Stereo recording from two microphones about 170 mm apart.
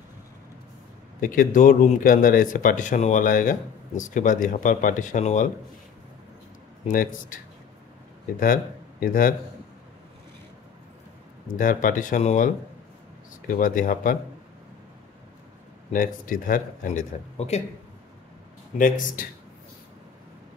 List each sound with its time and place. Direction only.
1.2 s speech: 55° left (ahead or behind)
6.9 s speech: 55° left (ahead or behind)
9.0 s a man's voice: 55° left (ahead or behind)
11.5 s speech: 55° left (ahead or behind)
13.5 s speech: 55° left (ahead or behind)
15.9 s speech: 50° left (ahead or behind)
18.8 s speech: 50° left (ahead or behind)